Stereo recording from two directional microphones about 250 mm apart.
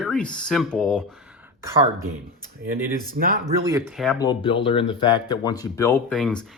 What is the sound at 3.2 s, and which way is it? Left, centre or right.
Speech, right.